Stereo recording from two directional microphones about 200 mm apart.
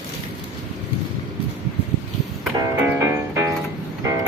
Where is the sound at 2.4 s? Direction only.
10° right (ahead or behind).